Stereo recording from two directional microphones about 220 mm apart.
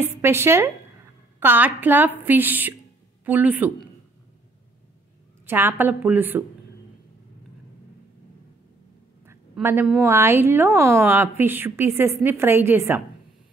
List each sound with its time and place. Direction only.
0.0 s a woman's voice: 10° right (ahead or behind)
5.5 s a woman's voice: 10° right (ahead or behind)
9.2 s a sound: 10° right (ahead or behind)
10.0 s a woman's voice: 10° right (ahead or behind)